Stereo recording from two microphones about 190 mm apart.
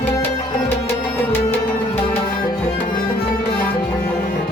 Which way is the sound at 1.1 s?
10° left (ahead or behind).